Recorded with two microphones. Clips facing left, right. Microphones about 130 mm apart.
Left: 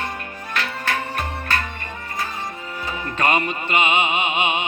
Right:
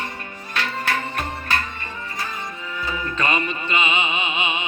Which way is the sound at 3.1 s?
55° left (ahead or behind).